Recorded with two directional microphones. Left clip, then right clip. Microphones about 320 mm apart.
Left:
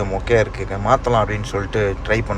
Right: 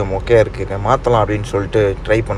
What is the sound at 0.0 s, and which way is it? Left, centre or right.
A man's voice, centre.